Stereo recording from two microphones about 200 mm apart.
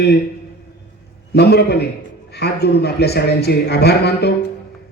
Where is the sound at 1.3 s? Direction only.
55° left (ahead or behind).